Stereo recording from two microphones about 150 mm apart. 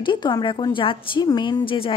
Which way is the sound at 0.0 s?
30° left (ahead or behind).